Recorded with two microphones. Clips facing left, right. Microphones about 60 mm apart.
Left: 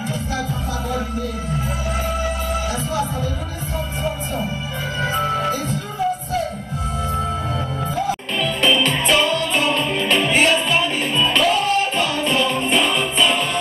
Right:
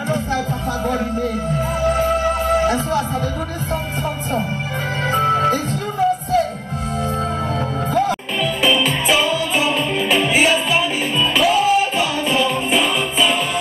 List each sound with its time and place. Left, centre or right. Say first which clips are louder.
2.6 s music: right 6 dB; right
8.4 s music: even; centre